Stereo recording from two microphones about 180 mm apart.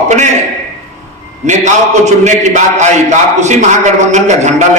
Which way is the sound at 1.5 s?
40° right (ahead or behind).